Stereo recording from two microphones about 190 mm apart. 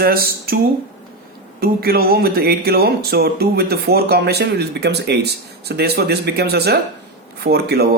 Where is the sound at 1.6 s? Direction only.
55° right (ahead or behind).